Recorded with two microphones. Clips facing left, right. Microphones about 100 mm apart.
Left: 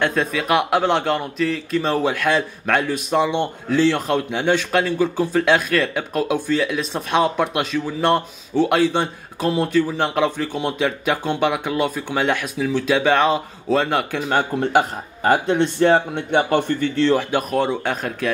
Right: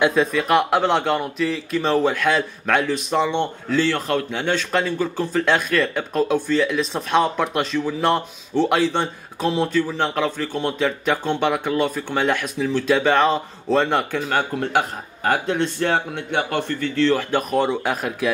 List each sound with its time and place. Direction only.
0.0 s a man's voice: centre (ahead or behind)
14.3 s speech: 20° left (ahead or behind)
17.4 s a man's voice: centre (ahead or behind)